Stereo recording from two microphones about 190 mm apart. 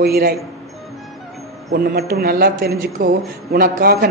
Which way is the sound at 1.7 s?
55° right (ahead or behind).